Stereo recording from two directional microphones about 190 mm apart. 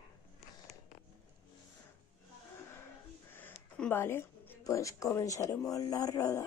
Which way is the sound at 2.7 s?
15° left (ahead or behind).